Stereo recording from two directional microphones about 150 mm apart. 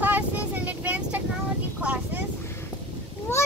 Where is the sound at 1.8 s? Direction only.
10° right (ahead or behind).